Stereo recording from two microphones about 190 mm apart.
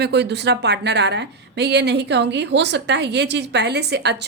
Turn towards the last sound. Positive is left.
turn(degrees=-60)  # may be behind; listen again after turning